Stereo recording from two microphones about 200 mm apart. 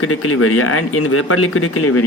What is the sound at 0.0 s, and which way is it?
Speech, 90° left.